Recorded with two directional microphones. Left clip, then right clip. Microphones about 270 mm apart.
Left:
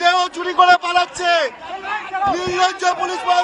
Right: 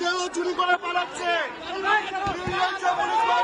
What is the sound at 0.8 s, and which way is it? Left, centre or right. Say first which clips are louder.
Speech: left 9 dB; left.